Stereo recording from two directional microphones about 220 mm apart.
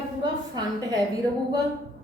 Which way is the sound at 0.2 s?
15° right (ahead or behind).